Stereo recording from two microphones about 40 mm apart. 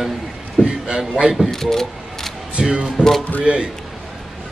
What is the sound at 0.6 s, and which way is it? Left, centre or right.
Speech, centre.